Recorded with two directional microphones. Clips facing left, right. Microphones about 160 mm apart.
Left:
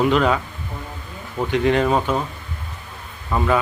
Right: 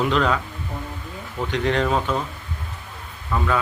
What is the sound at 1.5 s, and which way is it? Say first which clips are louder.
Speech: left 4 dB; 10° left (ahead or behind).